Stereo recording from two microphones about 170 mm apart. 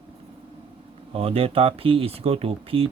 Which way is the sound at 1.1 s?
35° right (ahead or behind).